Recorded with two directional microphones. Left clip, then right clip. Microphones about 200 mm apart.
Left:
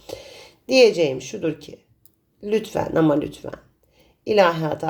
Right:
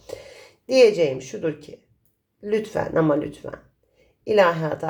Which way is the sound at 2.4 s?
20° left (ahead or behind).